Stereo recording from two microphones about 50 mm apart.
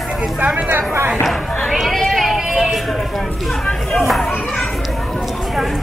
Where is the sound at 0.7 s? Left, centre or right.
Right.